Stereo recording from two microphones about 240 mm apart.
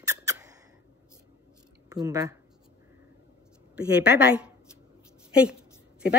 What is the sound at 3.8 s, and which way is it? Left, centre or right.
A woman's voice, centre.